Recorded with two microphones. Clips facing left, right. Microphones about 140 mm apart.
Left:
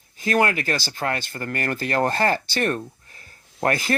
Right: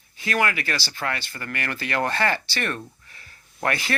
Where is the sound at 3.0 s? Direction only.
40° left (ahead or behind).